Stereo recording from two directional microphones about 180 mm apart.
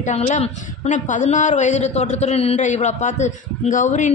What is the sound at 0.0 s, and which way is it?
A woman's voice, 40° left (ahead or behind).